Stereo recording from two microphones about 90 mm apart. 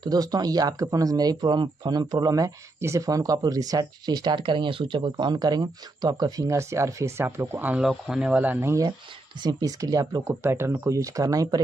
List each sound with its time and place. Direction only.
0.0 s speech: 45° right (ahead or behind); by 7.8 s 20° right (ahead or behind)
7.8 s speech: 5° right (ahead or behind)
8.6 s speech: 40° right (ahead or behind)